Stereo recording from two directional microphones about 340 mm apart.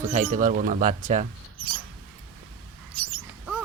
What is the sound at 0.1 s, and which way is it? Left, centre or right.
Speech, right.